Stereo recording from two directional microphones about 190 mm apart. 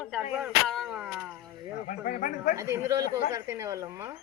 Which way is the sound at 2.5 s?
15° right (ahead or behind).